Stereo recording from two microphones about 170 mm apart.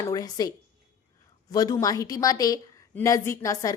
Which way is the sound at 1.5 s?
20° left (ahead or behind).